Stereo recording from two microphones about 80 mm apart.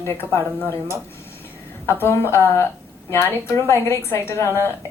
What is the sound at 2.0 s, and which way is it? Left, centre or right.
A woman's voice, left.